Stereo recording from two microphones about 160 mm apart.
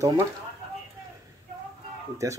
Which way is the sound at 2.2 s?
20° right (ahead or behind).